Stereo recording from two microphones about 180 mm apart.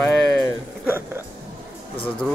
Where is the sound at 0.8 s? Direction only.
10° right (ahead or behind).